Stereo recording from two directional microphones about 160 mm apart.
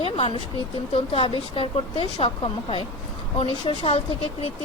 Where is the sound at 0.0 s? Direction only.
30° left (ahead or behind).